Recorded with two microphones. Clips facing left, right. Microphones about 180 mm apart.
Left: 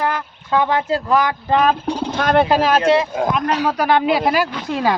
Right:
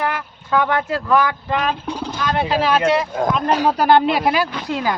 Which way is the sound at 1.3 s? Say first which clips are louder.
Left 5 dB; 35° left (ahead or behind).